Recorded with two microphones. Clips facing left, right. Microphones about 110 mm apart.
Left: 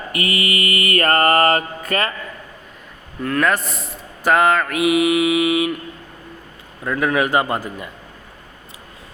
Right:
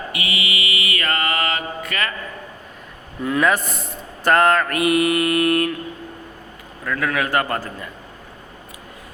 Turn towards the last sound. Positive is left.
turn(degrees=15)  # may be behind; listen again after turning